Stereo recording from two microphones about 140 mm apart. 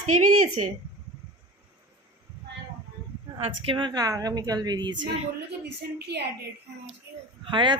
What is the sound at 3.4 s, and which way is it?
A woman's voice, 40° right (ahead or behind).